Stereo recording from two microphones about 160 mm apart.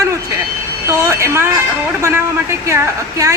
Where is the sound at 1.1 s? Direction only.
15° right (ahead or behind).